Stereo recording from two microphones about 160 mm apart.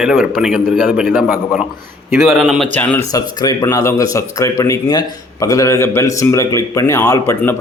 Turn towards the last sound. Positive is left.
turn(degrees=15)  # may be behind; listen again after turning